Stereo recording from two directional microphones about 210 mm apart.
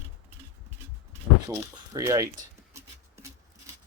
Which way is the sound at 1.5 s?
15° right (ahead or behind).